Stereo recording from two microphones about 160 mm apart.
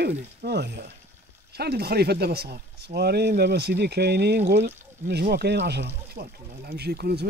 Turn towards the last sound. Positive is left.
turn(degrees=-90)